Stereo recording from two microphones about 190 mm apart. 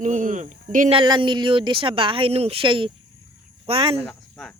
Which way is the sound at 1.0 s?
25° right (ahead or behind).